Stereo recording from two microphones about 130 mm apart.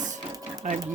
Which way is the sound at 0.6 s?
65° right (ahead or behind).